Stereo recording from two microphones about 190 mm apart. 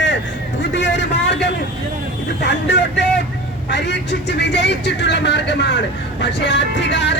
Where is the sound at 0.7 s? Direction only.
70° left (ahead or behind).